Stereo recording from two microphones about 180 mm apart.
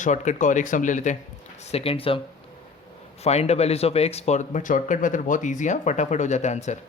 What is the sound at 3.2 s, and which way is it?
Speech, 35° left (ahead or behind).